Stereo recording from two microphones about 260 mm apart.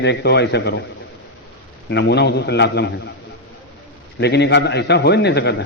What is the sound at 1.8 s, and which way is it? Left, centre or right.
A man's voice, left.